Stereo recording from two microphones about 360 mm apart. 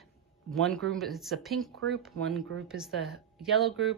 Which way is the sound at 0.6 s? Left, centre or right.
Centre.